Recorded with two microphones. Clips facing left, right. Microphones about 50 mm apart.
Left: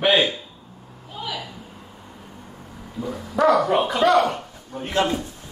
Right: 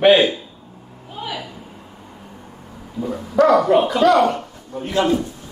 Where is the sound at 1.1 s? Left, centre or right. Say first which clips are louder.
Right 2 dB; centre.